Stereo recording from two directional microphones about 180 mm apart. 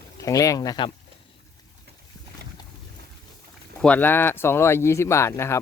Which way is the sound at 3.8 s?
10° left (ahead or behind).